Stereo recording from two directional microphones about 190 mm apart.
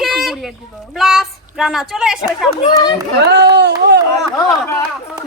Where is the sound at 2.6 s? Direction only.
25° left (ahead or behind).